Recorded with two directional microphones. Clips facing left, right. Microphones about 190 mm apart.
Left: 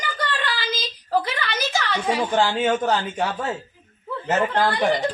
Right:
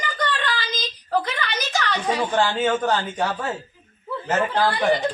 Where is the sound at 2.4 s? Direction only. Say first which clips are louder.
Even; 15° left (ahead or behind).